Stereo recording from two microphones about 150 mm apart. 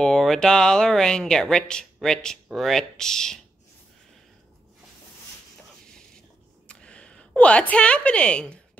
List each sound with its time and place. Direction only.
0.0 s speech: centre (ahead or behind)
6.7 s a woman's voice: 5° left (ahead or behind)